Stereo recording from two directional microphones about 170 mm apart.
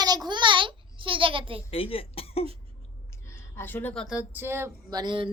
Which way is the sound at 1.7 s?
35° left (ahead or behind).